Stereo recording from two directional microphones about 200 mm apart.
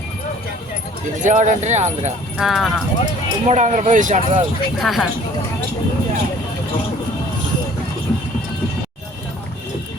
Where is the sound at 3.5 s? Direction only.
35° right (ahead or behind).